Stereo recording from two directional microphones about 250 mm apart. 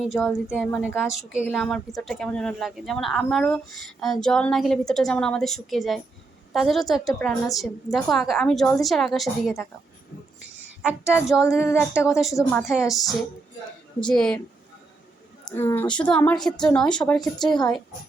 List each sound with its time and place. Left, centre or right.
0.1 s speech: centre
10.8 s speech: centre
11.6 s speech: centre
12.1 s speech: centre
14.0 s speech: centre
15.4 s speech: centre